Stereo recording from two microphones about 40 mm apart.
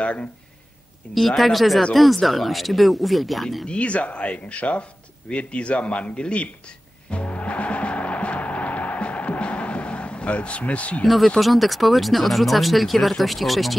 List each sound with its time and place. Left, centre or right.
0.0 s speech: left
1.1 s speech: centre
3.6 s speech: left
7.1 s music: left
11.2 s speech: centre